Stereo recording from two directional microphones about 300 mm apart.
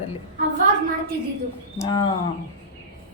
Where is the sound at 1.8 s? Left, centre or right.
Centre.